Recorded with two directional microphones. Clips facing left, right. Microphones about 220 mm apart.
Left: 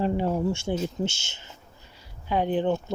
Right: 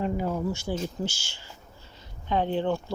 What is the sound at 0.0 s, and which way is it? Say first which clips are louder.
Speech: left 3 dB; 30° left (ahead or behind).